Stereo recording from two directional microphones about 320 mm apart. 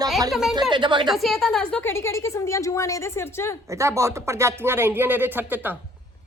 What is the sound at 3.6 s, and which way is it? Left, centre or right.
Speech, centre.